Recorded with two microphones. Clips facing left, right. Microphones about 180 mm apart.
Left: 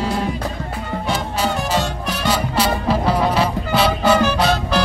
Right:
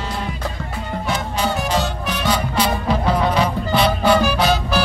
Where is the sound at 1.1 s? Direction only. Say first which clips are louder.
Left 1 dB; 5° left (ahead or behind).